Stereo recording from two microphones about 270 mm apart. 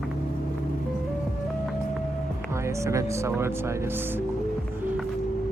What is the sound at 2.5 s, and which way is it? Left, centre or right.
Speech, centre.